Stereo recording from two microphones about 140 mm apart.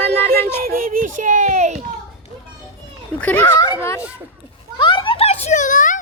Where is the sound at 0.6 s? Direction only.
90° right; by 1.8 s 55° right (ahead or behind).